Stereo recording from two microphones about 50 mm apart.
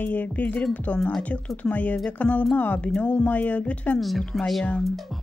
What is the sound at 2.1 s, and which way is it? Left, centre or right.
Speech, left.